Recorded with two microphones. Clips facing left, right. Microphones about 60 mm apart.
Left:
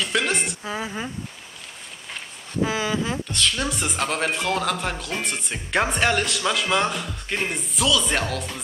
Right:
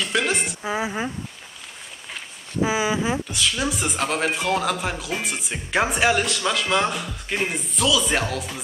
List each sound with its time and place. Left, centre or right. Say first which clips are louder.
0.0 s a woman's voice: right 1 dB; centre
0.6 s speech: right 4 dB; centre
2.6 s speech: right 2 dB; centre